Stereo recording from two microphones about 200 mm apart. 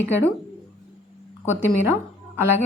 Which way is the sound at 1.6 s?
10° right (ahead or behind).